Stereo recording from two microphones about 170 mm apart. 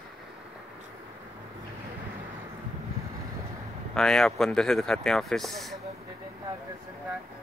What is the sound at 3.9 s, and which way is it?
Speech, 5° left (ahead or behind).